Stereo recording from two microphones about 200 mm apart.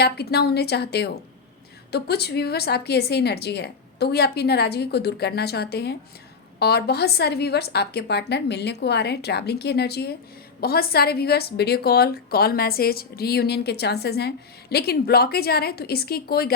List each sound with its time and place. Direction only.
0.0 s a woman's voice: 55° left (ahead or behind)